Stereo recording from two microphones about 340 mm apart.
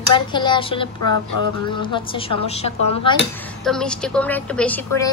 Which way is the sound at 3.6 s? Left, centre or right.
Centre.